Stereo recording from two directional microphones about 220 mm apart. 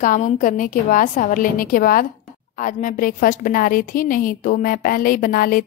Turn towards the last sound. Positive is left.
turn(degrees=40)  # may be behind; listen again after turning